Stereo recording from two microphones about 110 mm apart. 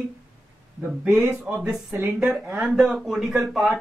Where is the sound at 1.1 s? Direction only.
20° right (ahead or behind).